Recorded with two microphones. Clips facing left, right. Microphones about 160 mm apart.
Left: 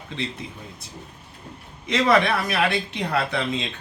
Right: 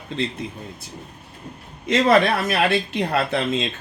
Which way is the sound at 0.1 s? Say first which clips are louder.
Right 5 dB; 50° right (ahead or behind).